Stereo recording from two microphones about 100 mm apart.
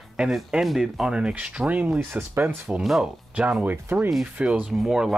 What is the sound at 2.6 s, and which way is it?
Speech, 5° right (ahead or behind).